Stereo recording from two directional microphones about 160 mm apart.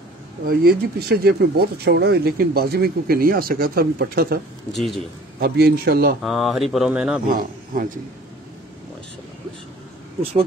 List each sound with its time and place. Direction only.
0.5 s speech: 80° right
4.7 s speech: centre (ahead or behind)
5.4 s speech: 75° right (ahead or behind)
6.2 s speech: centre (ahead or behind)
7.2 s speech: 60° right (ahead or behind)